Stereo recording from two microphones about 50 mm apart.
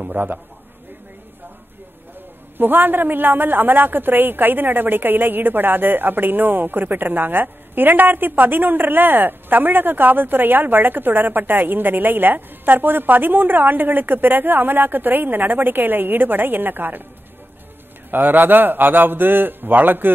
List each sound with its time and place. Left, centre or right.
0.0 s a woman's voice: right
2.5 s a woman's voice: right
18.1 s a woman's voice: right